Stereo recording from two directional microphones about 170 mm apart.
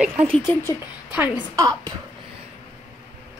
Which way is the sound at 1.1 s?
10° right (ahead or behind).